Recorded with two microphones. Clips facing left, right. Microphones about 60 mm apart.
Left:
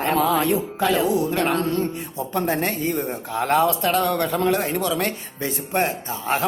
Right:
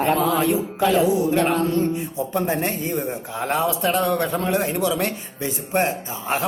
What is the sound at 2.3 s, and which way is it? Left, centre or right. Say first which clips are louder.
A man's voice: left 1 dB; centre.